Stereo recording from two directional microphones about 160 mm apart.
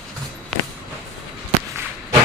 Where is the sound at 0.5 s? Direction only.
5° left (ahead or behind).